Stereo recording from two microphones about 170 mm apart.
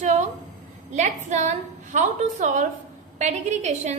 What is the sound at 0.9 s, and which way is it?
A woman's voice, 45° right (ahead or behind).